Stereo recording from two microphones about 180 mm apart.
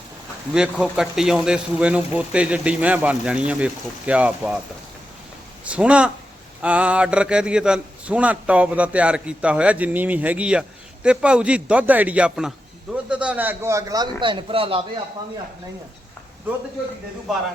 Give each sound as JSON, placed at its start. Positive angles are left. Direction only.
{"t": 0.5, "sound": "a man's voice", "side_deg": -5}
{"t": 5.6, "sound": "a man's voice", "side_deg": -5}